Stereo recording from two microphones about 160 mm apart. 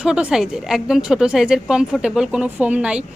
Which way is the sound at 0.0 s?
5° right (ahead or behind).